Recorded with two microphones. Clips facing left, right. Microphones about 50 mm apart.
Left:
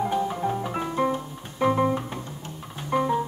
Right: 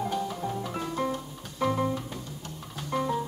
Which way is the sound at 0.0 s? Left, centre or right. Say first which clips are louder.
Left 5 dB; left.